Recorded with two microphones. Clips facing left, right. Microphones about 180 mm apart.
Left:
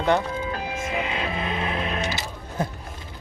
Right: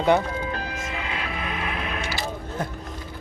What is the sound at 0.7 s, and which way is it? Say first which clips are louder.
Music: left 4 dB; 20° left (ahead or behind).